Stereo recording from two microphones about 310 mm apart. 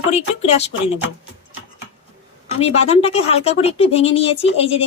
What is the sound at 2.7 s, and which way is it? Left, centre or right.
Speech, centre.